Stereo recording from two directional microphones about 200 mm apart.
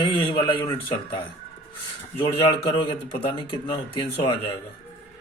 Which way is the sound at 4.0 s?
25° left (ahead or behind).